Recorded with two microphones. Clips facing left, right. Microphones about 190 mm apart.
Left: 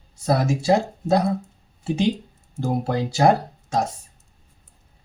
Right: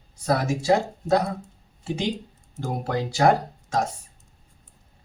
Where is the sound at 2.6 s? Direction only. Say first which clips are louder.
Left 4 dB; 25° left (ahead or behind).